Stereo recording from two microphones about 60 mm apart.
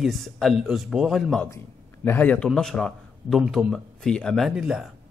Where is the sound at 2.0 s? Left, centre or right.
Left.